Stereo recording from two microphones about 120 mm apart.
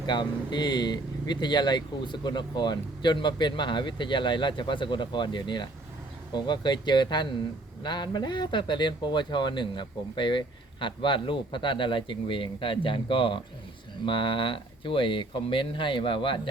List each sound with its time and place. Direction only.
0.0 s speech: 40° left (ahead or behind)